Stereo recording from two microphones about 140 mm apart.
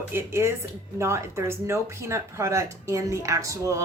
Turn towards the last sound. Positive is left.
turn(degrees=-20)  # may be behind; listen again after turning